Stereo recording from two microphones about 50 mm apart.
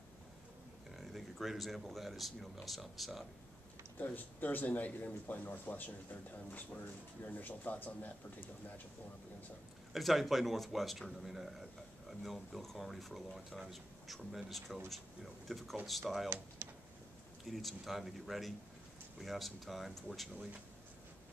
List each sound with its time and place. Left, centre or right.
0.9 s speech: centre
4.0 s speech: left
9.9 s speech: centre
16.6 s a sound: right
17.5 s speech: centre